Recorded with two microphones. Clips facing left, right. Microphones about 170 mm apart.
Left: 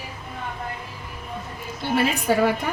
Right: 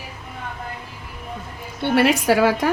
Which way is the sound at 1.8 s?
70° right (ahead or behind).